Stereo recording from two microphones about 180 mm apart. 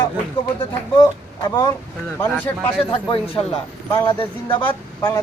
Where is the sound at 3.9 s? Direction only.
15° left (ahead or behind).